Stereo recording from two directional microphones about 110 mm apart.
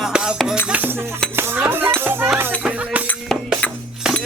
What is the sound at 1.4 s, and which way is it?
Cutlery, 20° right (ahead or behind).